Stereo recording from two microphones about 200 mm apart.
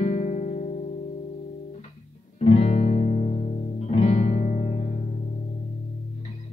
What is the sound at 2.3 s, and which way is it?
Music, 30° left (ahead or behind).